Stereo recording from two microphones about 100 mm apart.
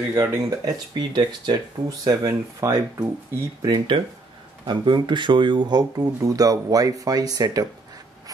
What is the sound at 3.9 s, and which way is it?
Speech, 50° right (ahead or behind).